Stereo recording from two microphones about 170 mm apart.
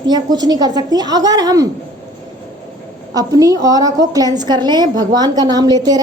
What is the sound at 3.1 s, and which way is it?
A woman's voice, 20° right (ahead or behind).